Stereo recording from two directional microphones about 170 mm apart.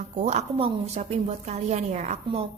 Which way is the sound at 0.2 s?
40° right (ahead or behind).